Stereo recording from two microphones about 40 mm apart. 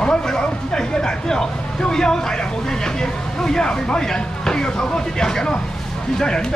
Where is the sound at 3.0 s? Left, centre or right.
Centre.